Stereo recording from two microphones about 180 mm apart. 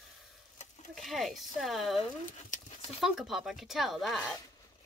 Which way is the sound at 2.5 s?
45° left (ahead or behind).